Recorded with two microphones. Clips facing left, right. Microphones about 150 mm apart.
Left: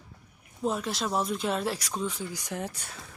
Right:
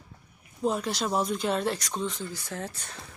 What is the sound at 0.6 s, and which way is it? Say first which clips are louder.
Speech: right 2 dB; centre (ahead or behind).